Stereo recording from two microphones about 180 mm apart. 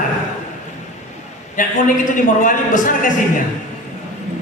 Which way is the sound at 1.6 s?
45° left (ahead or behind).